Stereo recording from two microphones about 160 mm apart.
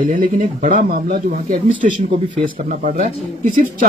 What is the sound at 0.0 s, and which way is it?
Speech, 55° right (ahead or behind).